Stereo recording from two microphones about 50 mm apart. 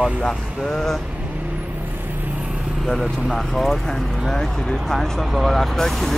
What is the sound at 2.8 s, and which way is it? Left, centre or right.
Speech, centre.